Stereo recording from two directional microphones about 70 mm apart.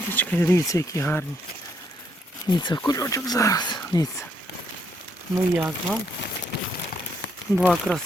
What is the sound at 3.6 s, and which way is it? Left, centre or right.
Speech, left.